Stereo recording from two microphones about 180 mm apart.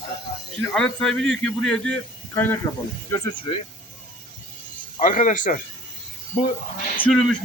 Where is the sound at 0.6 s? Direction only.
5° left (ahead or behind).